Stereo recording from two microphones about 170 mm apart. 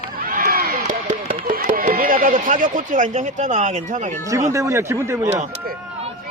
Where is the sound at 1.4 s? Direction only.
55° right (ahead or behind).